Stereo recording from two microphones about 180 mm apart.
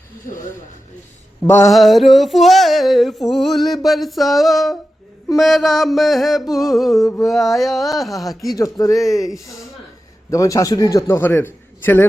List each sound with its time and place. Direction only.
1.5 s a man's voice: 15° left (ahead or behind)
1.7 s female singing: centre (ahead or behind)
8.4 s speech: 20° left (ahead or behind)
9.0 s female singing: centre (ahead or behind)
10.3 s a man's voice: 20° left (ahead or behind)